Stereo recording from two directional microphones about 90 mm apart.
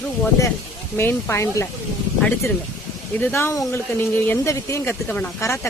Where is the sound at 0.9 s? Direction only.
30° left (ahead or behind).